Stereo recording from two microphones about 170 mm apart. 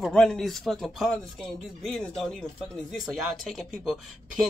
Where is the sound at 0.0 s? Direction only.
5° left (ahead or behind).